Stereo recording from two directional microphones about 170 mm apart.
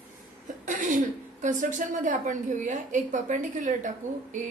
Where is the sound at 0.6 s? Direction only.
50° right (ahead or behind).